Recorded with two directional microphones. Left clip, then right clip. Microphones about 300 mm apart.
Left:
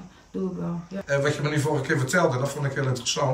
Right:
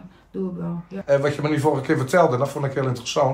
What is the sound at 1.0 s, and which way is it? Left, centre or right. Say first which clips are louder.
Speech: right 5 dB; centre.